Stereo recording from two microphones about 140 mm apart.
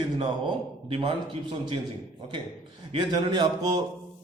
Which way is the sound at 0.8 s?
40° right (ahead or behind).